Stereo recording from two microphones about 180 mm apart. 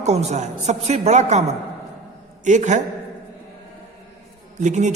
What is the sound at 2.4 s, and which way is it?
Speech, 40° right (ahead or behind).